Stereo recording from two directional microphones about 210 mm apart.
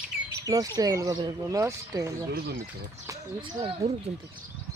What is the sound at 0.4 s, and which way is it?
Speech, 15° right (ahead or behind).